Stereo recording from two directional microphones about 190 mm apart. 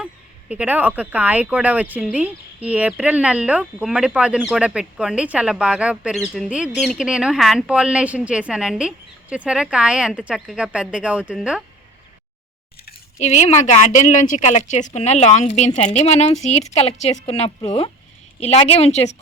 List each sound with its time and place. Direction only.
0.0 s speech: 5° right (ahead or behind)
13.1 s speech: 35° left (ahead or behind)